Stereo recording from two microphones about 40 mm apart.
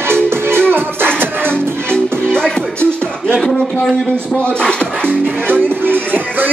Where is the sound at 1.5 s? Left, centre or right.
Left.